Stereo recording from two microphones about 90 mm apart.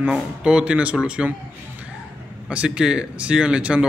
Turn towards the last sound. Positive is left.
turn(degrees=-10)  # may be behind; listen again after turning